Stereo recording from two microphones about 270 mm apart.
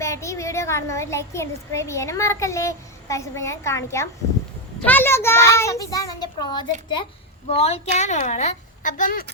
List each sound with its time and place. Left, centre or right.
0.0 s a child's voice: centre; by 9.2 s left